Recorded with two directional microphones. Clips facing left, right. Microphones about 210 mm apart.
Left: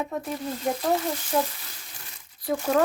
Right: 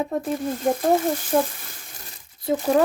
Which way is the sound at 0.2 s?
50° right (ahead or behind).